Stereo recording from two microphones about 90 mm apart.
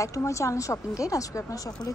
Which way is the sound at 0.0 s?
35° left (ahead or behind).